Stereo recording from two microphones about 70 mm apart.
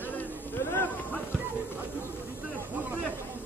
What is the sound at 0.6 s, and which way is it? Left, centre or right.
Run, left.